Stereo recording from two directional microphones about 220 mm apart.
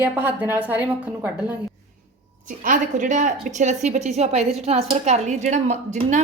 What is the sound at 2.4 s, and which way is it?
A woman's voice, 35° right (ahead or behind).